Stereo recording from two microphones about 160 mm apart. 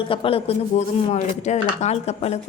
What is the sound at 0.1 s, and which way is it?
Speech, 35° left (ahead or behind).